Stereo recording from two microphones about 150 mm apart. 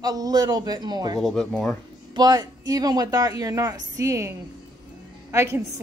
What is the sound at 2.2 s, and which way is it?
A woman's voice, 25° right (ahead or behind).